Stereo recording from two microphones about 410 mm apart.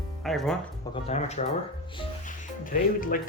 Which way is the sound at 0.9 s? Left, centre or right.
Centre.